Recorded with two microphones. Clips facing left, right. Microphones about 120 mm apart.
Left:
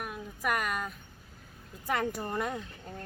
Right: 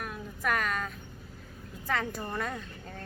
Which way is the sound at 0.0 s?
10° left (ahead or behind).